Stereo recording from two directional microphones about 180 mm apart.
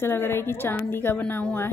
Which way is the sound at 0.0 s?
10° left (ahead or behind).